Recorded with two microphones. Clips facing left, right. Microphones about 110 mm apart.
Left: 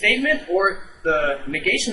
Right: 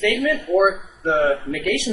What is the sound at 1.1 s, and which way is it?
Speech, 20° right (ahead or behind).